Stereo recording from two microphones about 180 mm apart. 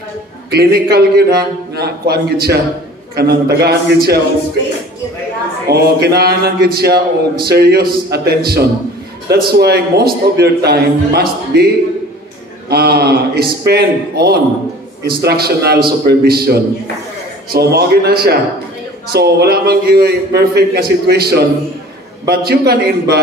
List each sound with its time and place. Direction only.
0.5 s a man's voice: 60° right (ahead or behind)
5.7 s a man's voice: 65° right (ahead or behind)
12.6 s a man's voice: 60° right (ahead or behind)